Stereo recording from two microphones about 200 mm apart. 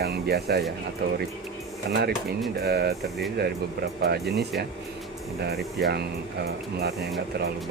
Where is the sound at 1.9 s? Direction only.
55° right (ahead or behind).